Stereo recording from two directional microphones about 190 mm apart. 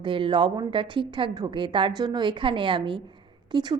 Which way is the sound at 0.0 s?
25° right (ahead or behind).